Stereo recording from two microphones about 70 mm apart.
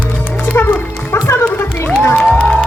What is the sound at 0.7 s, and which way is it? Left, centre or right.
Music, left.